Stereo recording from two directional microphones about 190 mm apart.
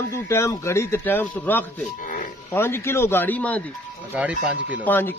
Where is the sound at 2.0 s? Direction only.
45° left (ahead or behind).